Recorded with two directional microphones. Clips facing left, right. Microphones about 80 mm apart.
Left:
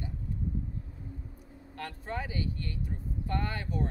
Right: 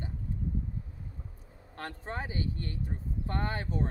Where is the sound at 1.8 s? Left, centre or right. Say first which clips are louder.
Left 1 dB; right.